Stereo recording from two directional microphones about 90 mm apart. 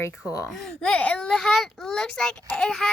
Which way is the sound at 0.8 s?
15° left (ahead or behind).